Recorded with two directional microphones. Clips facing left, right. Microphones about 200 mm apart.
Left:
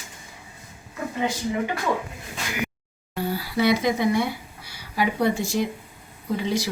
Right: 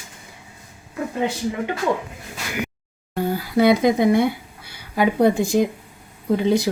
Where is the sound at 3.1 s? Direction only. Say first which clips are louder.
Right 5 dB; 50° right (ahead or behind).